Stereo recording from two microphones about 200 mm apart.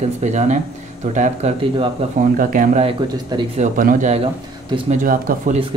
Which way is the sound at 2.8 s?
20° right (ahead or behind).